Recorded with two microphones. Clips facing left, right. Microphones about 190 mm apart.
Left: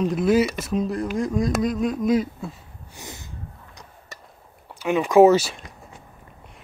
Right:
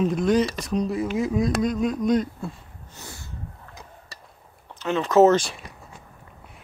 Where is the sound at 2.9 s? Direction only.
15° left (ahead or behind).